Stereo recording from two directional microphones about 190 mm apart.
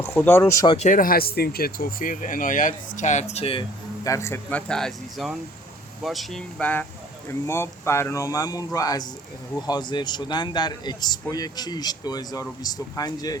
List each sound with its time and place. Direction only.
0.0 s speech: 15° left (ahead or behind)
0.8 s speech: 45° left (ahead or behind)
4.0 s speech: 15° left (ahead or behind)